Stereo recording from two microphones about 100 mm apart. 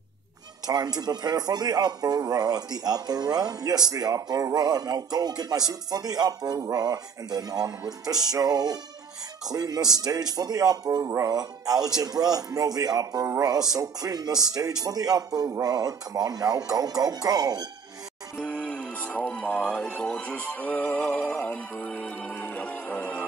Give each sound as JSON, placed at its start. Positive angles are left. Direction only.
{"t": 0.7, "sound": "a man's voice", "side_deg": -40}
{"t": 11.1, "sound": "speech", "side_deg": -30}
{"t": 11.3, "sound": "a man's voice", "side_deg": -40}
{"t": 18.4, "sound": "music", "side_deg": 15}